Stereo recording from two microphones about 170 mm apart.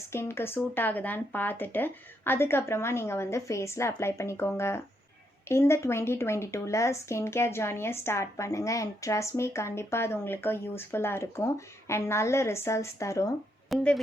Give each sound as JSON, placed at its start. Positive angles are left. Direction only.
{"t": 0.1, "sound": "speech", "side_deg": 15}
{"t": 13.7, "sound": "speech", "side_deg": 0}